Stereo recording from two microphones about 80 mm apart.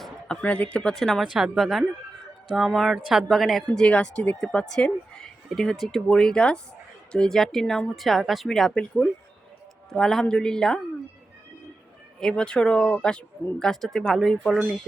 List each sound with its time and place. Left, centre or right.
0.4 s speech: centre
0.9 s speech: centre
3.8 s speech: centre
4.4 s speech: centre
12.2 s speech: centre